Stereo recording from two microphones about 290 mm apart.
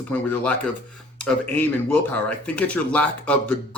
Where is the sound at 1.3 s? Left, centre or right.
Centre.